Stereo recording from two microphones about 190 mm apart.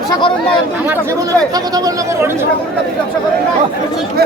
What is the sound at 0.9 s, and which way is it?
Speech, 20° right (ahead or behind).